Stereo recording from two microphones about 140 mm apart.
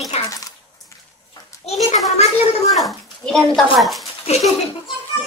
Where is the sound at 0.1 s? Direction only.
50° left (ahead or behind).